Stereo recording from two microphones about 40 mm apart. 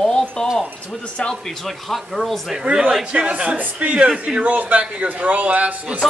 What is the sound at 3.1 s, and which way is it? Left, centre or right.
Speech, right.